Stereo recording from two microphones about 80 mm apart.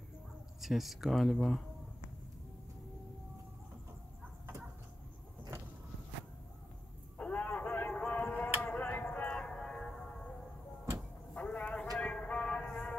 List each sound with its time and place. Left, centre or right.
0.6 s speech: centre
7.2 s a sound: centre
7.9 s music: centre
9.1 s train: centre
11.3 s vehicle: centre
12.0 s a sound: centre